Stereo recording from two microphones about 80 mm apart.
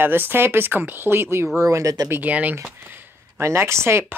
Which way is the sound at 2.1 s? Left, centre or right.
Centre.